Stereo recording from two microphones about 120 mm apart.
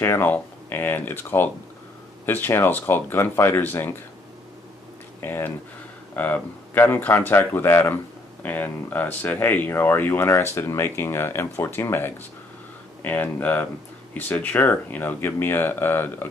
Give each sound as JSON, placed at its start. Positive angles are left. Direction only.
{"t": 0.0, "sound": "speech", "side_deg": 15}
{"t": 5.2, "sound": "speech", "side_deg": 15}